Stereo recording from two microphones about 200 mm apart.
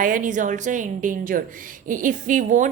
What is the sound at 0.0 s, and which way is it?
A woman's voice, 40° right (ahead or behind).